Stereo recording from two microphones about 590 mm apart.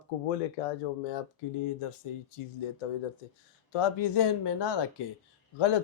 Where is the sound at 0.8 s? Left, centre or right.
Left.